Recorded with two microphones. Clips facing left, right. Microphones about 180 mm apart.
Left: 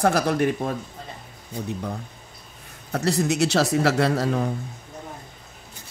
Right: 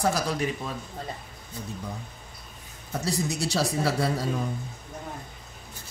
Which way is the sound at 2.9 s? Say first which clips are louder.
Left 6 dB; 65° left (ahead or behind).